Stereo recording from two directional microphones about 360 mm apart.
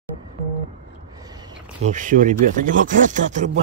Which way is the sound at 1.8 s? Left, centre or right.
Right.